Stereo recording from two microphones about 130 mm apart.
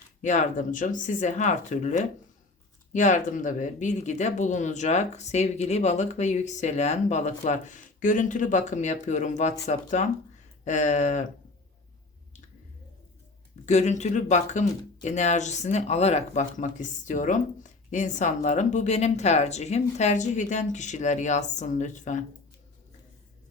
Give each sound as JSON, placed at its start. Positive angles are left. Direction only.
{"t": 0.2, "sound": "speech", "side_deg": 65}
{"t": 13.7, "sound": "speech", "side_deg": 60}